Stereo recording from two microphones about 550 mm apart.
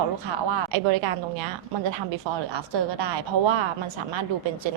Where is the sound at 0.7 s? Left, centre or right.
Right.